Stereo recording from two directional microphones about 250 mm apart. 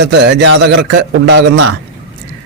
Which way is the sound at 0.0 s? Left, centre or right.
Right.